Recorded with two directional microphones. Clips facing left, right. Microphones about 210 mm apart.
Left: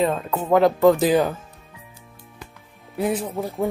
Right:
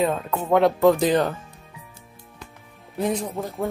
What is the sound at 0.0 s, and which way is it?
Speech, centre (ahead or behind).